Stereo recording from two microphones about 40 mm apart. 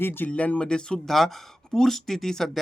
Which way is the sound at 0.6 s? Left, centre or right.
Left.